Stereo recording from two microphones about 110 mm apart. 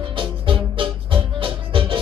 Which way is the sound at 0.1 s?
50° right (ahead or behind).